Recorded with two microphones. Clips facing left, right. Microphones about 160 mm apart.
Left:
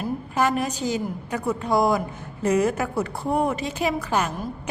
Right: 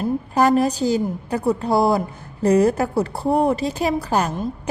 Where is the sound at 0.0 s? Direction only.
35° right (ahead or behind).